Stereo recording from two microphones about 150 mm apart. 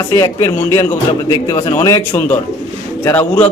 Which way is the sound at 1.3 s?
30° left (ahead or behind).